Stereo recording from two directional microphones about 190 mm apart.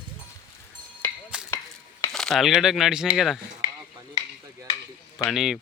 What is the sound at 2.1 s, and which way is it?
Speech, centre (ahead or behind).